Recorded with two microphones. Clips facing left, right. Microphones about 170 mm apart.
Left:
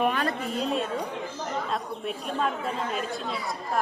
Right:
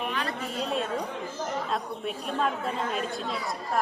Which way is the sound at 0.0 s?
50° left (ahead or behind).